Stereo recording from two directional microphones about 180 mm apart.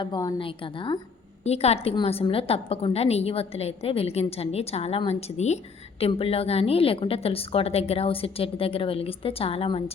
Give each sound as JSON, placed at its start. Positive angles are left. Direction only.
{"t": 0.0, "sound": "a woman's voice", "side_deg": 25}